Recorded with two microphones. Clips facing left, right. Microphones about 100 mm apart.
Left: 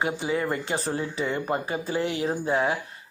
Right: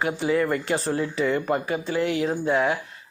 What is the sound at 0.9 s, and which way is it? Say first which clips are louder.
Speech: right 4 dB; 25° left (ahead or behind).